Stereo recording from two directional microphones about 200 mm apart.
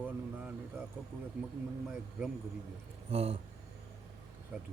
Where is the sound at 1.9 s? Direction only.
5° right (ahead or behind).